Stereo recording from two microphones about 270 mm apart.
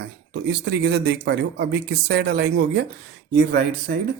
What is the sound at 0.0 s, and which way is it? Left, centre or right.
Speech, right.